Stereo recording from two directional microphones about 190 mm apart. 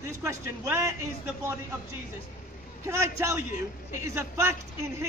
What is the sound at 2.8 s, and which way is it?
Speech, 15° right (ahead or behind).